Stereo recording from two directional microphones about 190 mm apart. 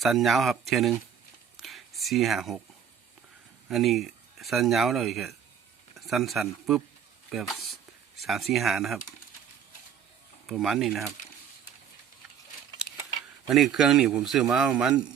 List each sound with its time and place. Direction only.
0.0 s speech: centre (ahead or behind)
1.5 s a sound: centre (ahead or behind)
3.7 s speech: centre (ahead or behind)
10.4 s speech: centre (ahead or behind)
13.5 s speech: centre (ahead or behind)